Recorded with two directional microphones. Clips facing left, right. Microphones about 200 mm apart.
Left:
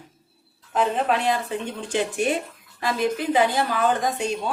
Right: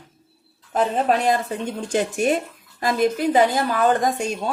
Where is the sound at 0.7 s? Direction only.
40° right (ahead or behind).